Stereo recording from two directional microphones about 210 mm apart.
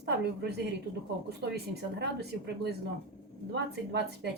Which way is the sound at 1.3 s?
50° right (ahead or behind).